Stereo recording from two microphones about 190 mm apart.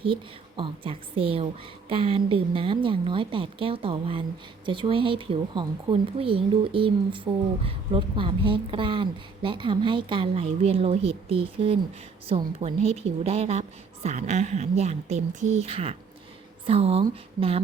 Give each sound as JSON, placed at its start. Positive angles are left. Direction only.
{"t": 0.0, "sound": "a woman's voice", "side_deg": -25}